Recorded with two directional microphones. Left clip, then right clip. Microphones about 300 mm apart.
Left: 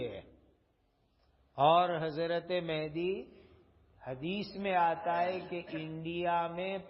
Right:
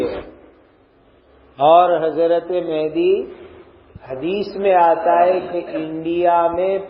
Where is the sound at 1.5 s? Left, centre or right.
Left.